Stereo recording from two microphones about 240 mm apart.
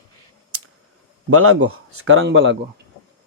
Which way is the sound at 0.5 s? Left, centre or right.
Right.